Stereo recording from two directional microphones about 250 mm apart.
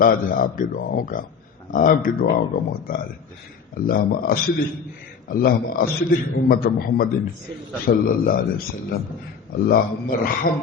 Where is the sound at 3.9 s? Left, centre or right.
Left.